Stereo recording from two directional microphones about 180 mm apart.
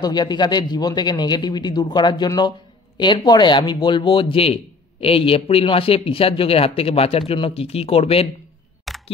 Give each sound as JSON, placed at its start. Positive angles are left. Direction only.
{"t": 0.0, "sound": "a man's voice", "side_deg": 25}
{"t": 8.9, "sound": "single-lens reflex camera", "side_deg": 0}